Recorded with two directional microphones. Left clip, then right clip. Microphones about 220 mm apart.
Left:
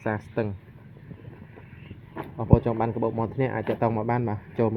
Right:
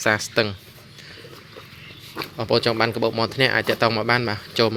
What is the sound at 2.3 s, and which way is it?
Speech, 30° right (ahead or behind).